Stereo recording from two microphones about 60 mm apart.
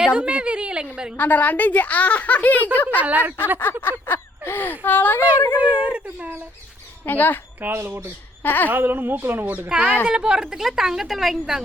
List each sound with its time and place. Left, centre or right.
0.0 s a woman's voice: centre
1.1 s a child's voice: left
3.0 s speech: right
3.6 s speech: left
5.7 s dog: right
7.0 s speech: left
7.6 s a woman's voice: right
8.4 s speech: left
8.7 s a woman's voice: right
9.6 s speech: centre